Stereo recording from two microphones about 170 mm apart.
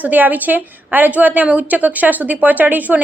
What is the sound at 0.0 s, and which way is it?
A woman's voice, 10° right (ahead or behind).